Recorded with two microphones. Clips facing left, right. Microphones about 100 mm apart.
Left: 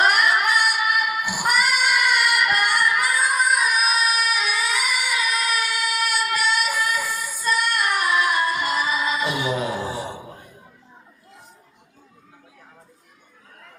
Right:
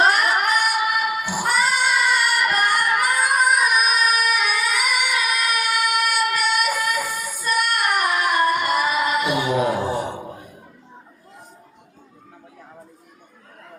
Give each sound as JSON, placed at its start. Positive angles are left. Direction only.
{"t": 0.0, "sound": "female singing", "side_deg": -35}
{"t": 7.5, "sound": "singing", "side_deg": -55}